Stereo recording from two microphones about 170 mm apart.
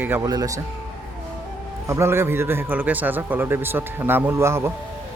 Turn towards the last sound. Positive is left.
turn(degrees=-15)  # may be behind; listen again after turning